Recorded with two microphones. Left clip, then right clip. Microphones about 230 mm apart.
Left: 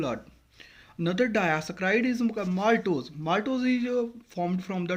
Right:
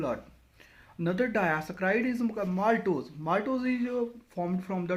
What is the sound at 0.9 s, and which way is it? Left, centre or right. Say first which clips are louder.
Speech: left 2 dB; left.